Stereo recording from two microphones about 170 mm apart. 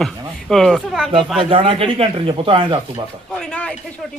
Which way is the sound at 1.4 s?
30° right (ahead or behind).